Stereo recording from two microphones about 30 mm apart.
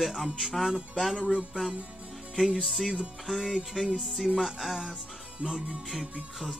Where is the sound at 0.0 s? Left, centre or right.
Centre.